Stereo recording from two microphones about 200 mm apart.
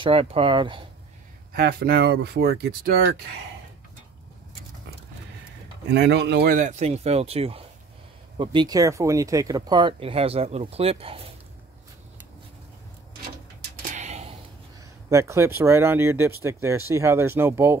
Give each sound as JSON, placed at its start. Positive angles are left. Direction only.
{"t": 0.0, "sound": "speech", "side_deg": -30}
{"t": 1.5, "sound": "speech", "side_deg": -50}
{"t": 5.9, "sound": "speech", "side_deg": -60}
{"t": 13.6, "sound": "a sound", "side_deg": -40}
{"t": 15.0, "sound": "speech", "side_deg": -15}